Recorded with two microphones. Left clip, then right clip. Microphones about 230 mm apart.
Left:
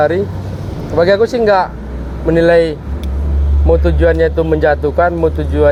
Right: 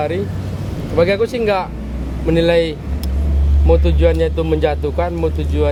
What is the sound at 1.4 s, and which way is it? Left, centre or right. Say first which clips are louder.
Speech: left 6 dB; centre.